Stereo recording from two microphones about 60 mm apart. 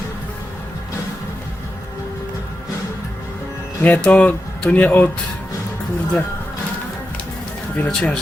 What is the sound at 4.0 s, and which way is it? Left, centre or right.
Speech, left.